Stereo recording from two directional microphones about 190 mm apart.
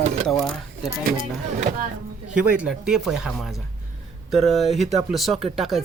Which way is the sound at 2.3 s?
5° right (ahead or behind).